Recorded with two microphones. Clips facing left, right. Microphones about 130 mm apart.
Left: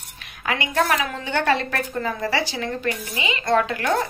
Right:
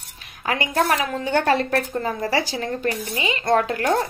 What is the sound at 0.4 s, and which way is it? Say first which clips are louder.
A woman's voice: right 1 dB; 35° right (ahead or behind).